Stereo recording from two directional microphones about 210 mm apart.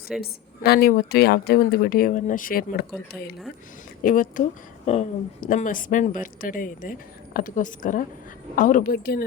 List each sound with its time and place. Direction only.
0.2 s a woman's voice: 50° left (ahead or behind)